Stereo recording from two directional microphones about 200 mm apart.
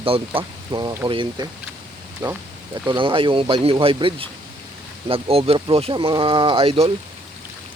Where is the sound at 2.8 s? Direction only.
25° right (ahead or behind).